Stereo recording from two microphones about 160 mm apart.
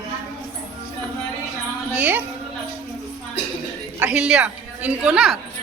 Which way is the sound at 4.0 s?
10° right (ahead or behind).